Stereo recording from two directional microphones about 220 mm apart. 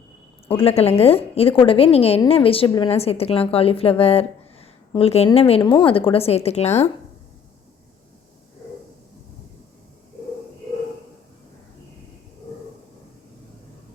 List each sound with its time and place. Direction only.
0.4 s a woman's voice: 25° left (ahead or behind)